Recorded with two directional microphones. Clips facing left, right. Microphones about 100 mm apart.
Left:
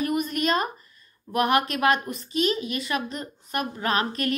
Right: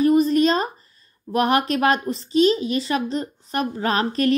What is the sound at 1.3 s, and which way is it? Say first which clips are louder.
A woman's voice: right 3 dB; 35° right (ahead or behind).